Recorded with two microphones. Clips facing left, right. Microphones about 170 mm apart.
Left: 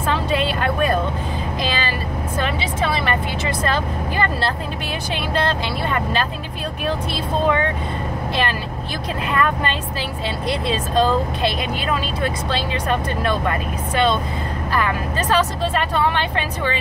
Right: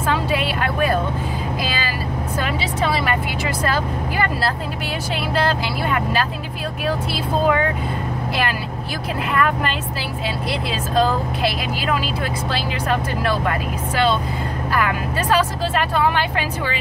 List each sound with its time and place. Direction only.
0.1 s music: 5° right (ahead or behind)
1.6 s vehicle: 5° right (ahead or behind)
5.3 s speech: 5° right (ahead or behind)
9.3 s speech: 5° right (ahead or behind)
14.8 s speech: 10° right (ahead or behind)